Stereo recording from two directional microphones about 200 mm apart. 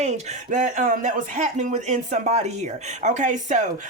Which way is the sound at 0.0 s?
35° right (ahead or behind).